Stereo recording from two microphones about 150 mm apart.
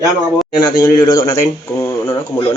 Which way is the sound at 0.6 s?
25° left (ahead or behind).